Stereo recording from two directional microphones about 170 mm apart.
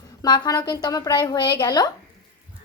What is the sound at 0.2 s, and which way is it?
A woman's voice, 25° left (ahead or behind).